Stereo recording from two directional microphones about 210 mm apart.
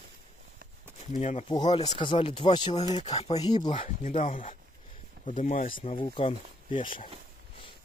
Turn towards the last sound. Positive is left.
turn(degrees=25)  # may be behind; listen again after turning